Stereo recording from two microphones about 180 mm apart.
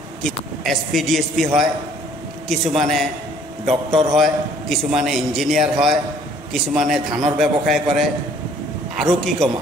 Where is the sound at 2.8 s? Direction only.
Centre (ahead or behind).